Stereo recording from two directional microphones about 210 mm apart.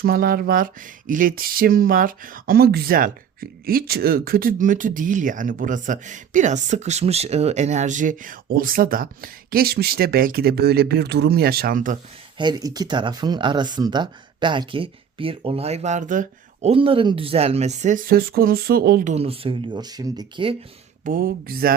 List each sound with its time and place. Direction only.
0.0 s speech: 45° right (ahead or behind)
12.4 s speech: 20° right (ahead or behind); by 19.1 s 45° right (ahead or behind)
19.1 s speech: 25° right (ahead or behind)
21.0 s speech: 40° right (ahead or behind)